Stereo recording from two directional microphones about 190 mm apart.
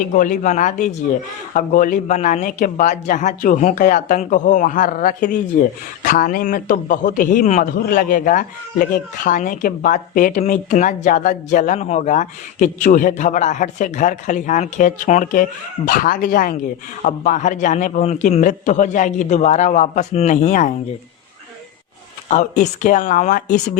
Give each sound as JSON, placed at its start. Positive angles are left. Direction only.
{"t": 0.0, "sound": "a man's voice", "side_deg": 45}
{"t": 22.3, "sound": "a man's voice", "side_deg": 40}